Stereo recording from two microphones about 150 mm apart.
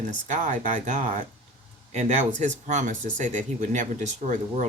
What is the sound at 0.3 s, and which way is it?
Speech, 55° right (ahead or behind).